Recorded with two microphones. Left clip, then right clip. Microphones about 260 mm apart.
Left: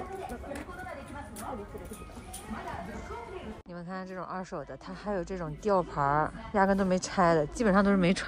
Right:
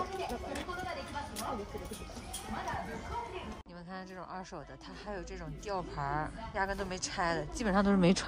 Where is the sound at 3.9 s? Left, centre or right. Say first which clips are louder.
Left 6 dB; centre.